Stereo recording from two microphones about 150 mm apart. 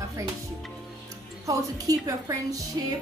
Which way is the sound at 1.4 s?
25° right (ahead or behind).